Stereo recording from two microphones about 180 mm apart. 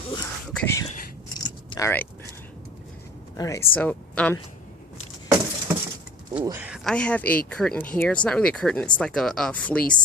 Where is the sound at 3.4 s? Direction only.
15° left (ahead or behind).